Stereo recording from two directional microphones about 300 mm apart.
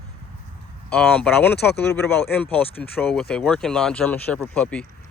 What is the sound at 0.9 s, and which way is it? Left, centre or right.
Speech, centre.